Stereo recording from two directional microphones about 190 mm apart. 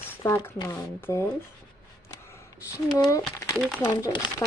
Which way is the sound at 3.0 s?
15° left (ahead or behind).